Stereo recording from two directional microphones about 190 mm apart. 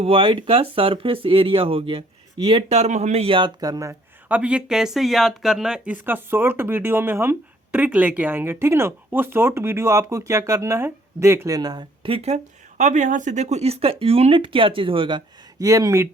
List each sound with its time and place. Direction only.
0.0 s speech: 30° right (ahead or behind)